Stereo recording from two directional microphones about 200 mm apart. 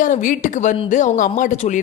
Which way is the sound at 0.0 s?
40° left (ahead or behind).